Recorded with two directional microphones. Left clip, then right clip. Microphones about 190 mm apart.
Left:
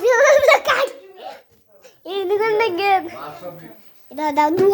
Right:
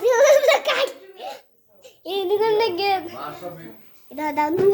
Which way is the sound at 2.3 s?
10° left (ahead or behind).